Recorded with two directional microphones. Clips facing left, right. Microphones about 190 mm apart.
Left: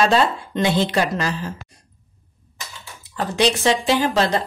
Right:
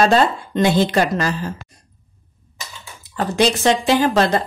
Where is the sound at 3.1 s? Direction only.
45° right (ahead or behind).